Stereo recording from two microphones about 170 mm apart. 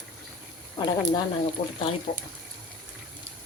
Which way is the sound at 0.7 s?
25° left (ahead or behind).